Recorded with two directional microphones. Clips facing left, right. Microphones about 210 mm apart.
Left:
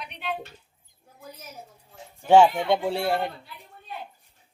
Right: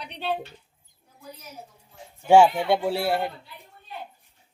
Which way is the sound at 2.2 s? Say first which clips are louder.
Even; 10° right (ahead or behind).